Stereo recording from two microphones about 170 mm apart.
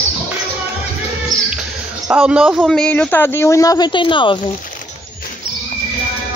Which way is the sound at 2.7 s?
5° left (ahead or behind).